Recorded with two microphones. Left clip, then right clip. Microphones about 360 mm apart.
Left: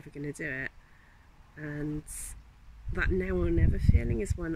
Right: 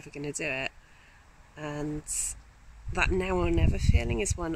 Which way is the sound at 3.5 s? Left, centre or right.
Right.